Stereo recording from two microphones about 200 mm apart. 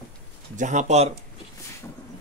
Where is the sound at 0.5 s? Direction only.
40° right (ahead or behind).